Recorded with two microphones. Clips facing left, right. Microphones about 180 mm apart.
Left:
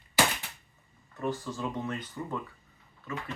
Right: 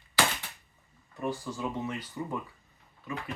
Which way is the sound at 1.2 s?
10° right (ahead or behind).